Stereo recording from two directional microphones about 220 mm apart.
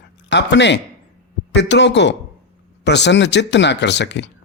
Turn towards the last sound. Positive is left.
turn(degrees=55)  # may be behind; listen again after turning